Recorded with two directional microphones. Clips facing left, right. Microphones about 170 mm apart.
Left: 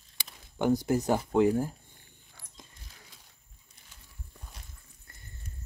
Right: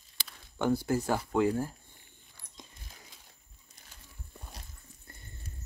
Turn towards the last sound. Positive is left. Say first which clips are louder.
# right 3 dB
turn(degrees=-35)  # may be behind; listen again after turning